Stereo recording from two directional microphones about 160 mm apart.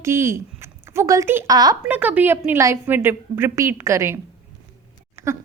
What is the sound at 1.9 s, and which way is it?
A woman's voice, 10° right (ahead or behind).